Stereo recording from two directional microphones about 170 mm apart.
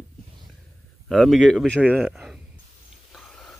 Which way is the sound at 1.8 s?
5° right (ahead or behind).